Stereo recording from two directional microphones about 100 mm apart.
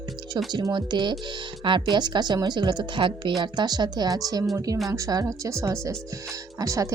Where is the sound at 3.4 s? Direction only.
45° right (ahead or behind).